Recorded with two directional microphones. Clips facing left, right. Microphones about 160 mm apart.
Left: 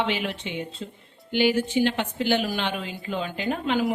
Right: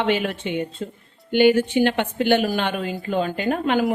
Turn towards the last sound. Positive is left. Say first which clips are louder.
# right 4 dB
turn(degrees=-55)  # may be behind; listen again after turning